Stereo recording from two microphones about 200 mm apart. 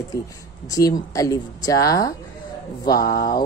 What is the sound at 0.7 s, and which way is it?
A woman's voice, 15° left (ahead or behind).